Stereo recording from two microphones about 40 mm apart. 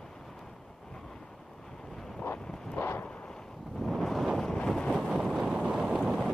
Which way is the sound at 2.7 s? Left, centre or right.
Left.